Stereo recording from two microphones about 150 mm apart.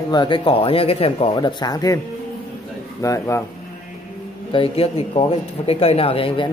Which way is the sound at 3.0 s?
20° left (ahead or behind).